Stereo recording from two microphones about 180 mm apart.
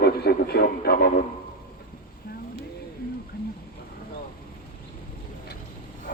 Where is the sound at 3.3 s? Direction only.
55° left (ahead or behind).